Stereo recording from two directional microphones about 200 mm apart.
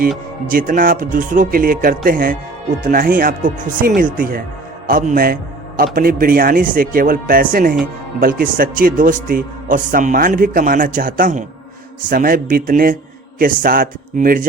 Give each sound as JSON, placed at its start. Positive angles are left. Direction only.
{"t": 0.4, "sound": "a man's voice", "side_deg": -45}